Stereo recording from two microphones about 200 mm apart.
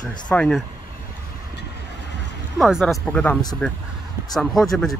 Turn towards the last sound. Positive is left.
turn(degrees=0)  # may be behind; listen again after turning